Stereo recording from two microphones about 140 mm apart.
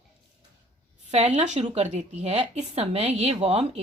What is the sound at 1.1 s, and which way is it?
A woman's voice, 50° right (ahead or behind).